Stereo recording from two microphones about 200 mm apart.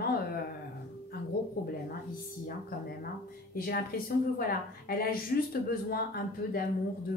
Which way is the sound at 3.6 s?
50° left (ahead or behind).